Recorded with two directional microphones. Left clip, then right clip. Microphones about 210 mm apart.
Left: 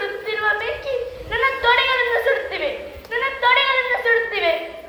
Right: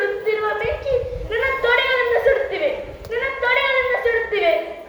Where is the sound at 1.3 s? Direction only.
20° left (ahead or behind).